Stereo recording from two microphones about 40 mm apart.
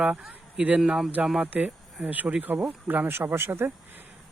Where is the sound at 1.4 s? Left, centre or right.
Right.